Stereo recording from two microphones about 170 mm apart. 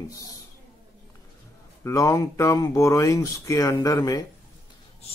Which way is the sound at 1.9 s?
20° left (ahead or behind).